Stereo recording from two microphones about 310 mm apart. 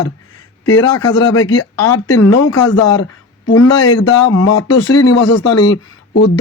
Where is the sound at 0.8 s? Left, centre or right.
Left.